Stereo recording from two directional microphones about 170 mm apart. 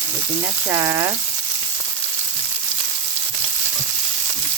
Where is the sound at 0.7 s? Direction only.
15° right (ahead or behind).